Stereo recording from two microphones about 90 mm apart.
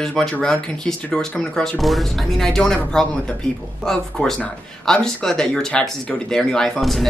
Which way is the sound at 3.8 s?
5° left (ahead or behind).